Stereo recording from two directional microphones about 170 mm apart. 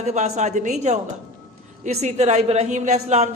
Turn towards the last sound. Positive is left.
turn(degrees=-40)  # may be behind; listen again after turning